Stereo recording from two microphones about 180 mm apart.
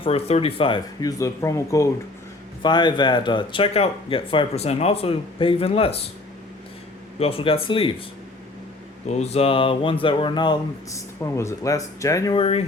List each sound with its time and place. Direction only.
0.0 s speech: 35° left (ahead or behind)
7.2 s speech: 30° left (ahead or behind)
9.0 s speech: 35° left (ahead or behind); by 12.4 s 20° left (ahead or behind)
12.4 s speech: 35° left (ahead or behind)